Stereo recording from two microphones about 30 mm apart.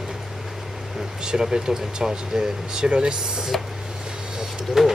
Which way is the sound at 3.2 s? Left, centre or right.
Right.